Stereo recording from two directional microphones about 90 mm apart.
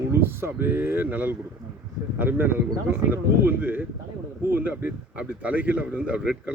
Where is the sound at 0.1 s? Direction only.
25° right (ahead or behind).